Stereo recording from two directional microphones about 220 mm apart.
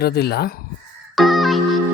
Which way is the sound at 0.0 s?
45° left (ahead or behind).